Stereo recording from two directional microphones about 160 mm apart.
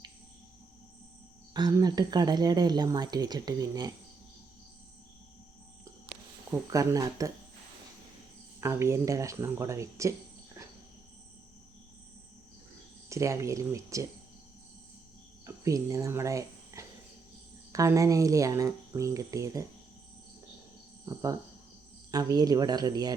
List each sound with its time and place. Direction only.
1.5 s speech: 25° right (ahead or behind)
6.1 s a sound: 70° right (ahead or behind)
6.5 s speech: 20° right (ahead or behind)
8.6 s speech: 15° right (ahead or behind)
13.1 s speech: 20° right (ahead or behind)
15.4 s speech: 20° right (ahead or behind)
21.0 s speech: 20° right (ahead or behind)